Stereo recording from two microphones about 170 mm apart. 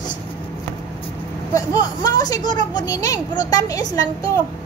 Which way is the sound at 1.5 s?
20° left (ahead or behind).